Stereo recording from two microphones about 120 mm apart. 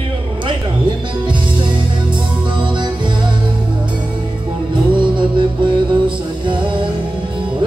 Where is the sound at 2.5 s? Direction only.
40° right (ahead or behind).